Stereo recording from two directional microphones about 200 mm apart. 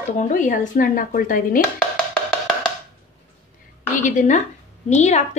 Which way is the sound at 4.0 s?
35° left (ahead or behind).